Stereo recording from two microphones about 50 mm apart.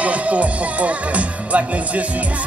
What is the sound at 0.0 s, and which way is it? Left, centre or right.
Speech, right.